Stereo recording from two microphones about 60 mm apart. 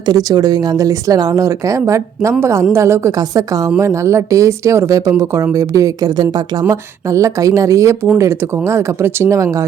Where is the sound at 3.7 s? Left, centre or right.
Right.